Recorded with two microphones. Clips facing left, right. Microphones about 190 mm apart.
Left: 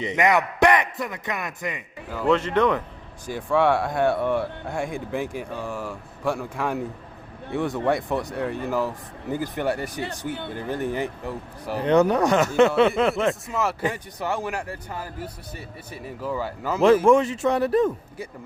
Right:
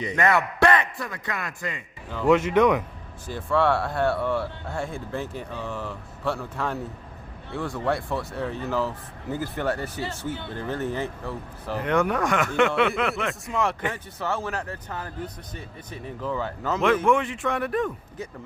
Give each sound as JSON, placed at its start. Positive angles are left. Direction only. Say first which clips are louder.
{"t": 0.0, "sound": "speech", "louder": "left 2 dB", "side_deg": 20}
{"t": 2.2, "sound": "speech", "louder": "right 2 dB", "side_deg": -10}
{"t": 3.2, "sound": "speech", "louder": "left 2 dB", "side_deg": 15}
{"t": 11.8, "sound": "speech", "louder": "left 5 dB", "side_deg": 30}
{"t": 13.5, "sound": "speech", "louder": "left 1 dB", "side_deg": 5}
{"t": 17.1, "sound": "speech", "louder": "left 5 dB", "side_deg": 40}